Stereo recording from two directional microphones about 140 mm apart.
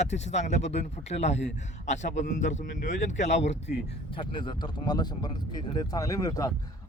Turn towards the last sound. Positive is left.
turn(degrees=25)  # may be behind; listen again after turning